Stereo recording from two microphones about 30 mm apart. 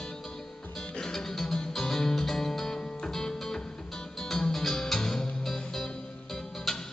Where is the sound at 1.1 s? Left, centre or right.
Centre.